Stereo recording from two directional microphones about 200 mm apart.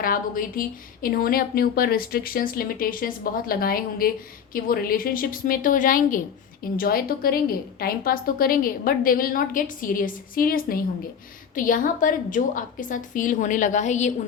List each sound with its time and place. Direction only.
0.0 s a woman's voice: 45° left (ahead or behind)